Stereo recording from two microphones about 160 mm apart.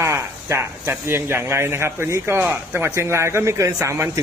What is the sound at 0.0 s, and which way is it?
Speech, 15° right (ahead or behind).